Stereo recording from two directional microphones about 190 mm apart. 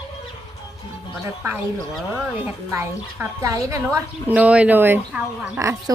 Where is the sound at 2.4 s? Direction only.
10° right (ahead or behind).